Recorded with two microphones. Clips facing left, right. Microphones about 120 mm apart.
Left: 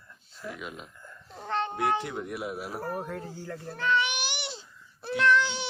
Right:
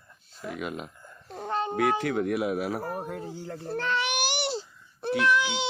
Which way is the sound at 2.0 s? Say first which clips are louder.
Right 8 dB; 90° right.